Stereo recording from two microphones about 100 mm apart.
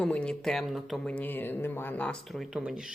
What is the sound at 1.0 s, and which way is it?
Speech, 15° left (ahead or behind).